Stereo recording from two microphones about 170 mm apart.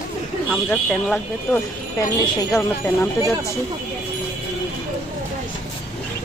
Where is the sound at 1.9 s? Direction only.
20° left (ahead or behind).